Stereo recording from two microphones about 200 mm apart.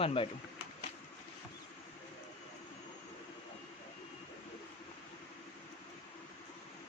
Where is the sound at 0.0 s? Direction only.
25° left (ahead or behind).